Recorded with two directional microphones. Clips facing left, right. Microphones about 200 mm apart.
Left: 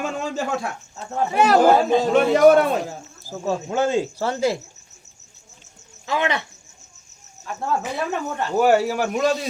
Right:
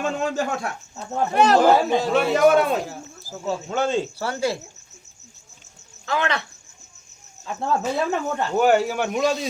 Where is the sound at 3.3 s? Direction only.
20° left (ahead or behind).